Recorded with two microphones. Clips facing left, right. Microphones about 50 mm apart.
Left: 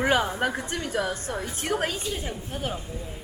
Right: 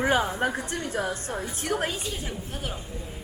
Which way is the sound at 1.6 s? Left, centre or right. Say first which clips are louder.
Left 1 dB; left.